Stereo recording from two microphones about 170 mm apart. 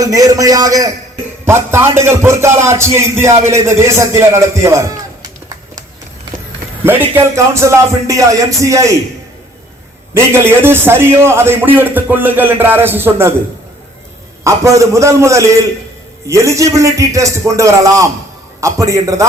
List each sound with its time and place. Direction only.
0.0 s a man's voice: 20° right (ahead or behind)
6.8 s a man's voice: 10° right (ahead or behind)
10.2 s a man's voice: 15° right (ahead or behind)
14.4 s a man's voice: 15° right (ahead or behind)